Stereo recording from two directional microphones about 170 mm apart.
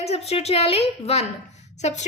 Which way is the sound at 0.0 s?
35° left (ahead or behind).